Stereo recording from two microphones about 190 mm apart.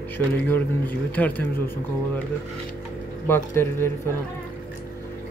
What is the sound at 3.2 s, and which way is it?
Speech, 10° left (ahead or behind).